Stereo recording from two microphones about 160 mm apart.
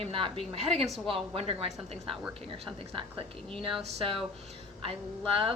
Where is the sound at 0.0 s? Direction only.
35° right (ahead or behind).